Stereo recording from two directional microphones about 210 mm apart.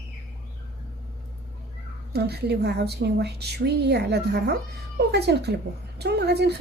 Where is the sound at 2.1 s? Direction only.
50° right (ahead or behind).